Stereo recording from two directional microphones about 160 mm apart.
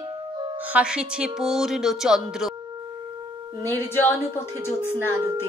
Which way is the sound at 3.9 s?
15° left (ahead or behind).